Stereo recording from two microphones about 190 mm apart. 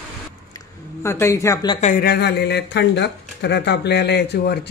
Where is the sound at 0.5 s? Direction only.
15° left (ahead or behind).